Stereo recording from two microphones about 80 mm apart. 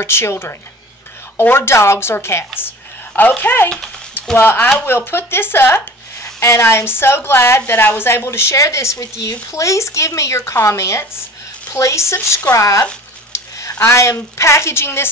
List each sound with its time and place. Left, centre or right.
0.0 s a woman's voice: left
13.3 s a sound: left
13.7 s a woman's voice: left